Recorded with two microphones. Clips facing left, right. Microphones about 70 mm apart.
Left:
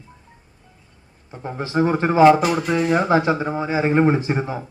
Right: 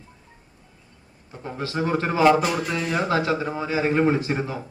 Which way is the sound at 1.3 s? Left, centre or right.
Left.